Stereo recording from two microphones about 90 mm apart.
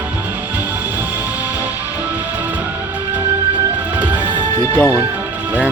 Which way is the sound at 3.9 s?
20° right (ahead or behind).